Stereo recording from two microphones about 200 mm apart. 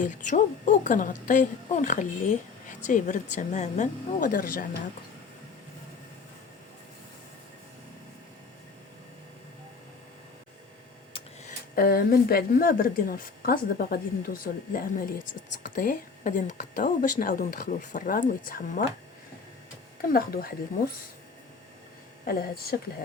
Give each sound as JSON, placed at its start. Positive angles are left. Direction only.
{"t": 0.0, "sound": "a woman's voice", "side_deg": 40}
{"t": 11.7, "sound": "a woman's voice", "side_deg": 45}
{"t": 20.0, "sound": "a woman's voice", "side_deg": 50}
{"t": 22.2, "sound": "a woman's voice", "side_deg": 50}